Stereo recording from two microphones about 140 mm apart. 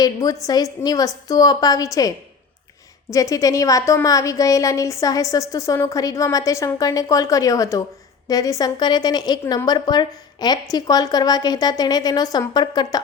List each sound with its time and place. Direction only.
0.0 s a woman's voice: 25° left (ahead or behind)